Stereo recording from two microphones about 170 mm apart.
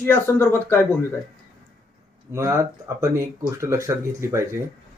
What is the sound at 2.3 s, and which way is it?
Speech, 15° right (ahead or behind).